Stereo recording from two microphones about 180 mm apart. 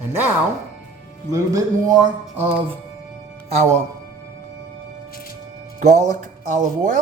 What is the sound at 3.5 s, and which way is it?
Speech, 40° right (ahead or behind).